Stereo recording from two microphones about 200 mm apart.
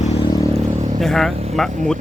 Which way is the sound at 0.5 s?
35° right (ahead or behind).